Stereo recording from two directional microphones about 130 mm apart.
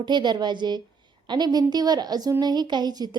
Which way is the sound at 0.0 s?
35° right (ahead or behind).